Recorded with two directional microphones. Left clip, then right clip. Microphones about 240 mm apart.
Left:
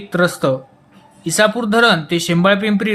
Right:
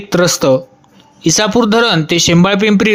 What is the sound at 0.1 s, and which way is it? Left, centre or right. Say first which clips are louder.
Speech: right 5 dB; right.